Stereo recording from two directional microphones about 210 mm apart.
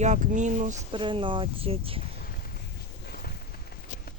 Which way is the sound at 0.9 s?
25° right (ahead or behind).